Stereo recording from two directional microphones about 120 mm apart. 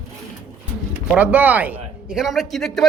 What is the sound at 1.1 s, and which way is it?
Speech, 15° right (ahead or behind).